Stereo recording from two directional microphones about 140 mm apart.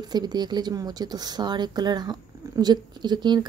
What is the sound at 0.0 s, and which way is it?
Speech, 30° right (ahead or behind).